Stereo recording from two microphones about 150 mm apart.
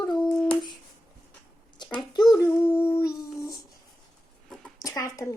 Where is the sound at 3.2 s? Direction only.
25° left (ahead or behind).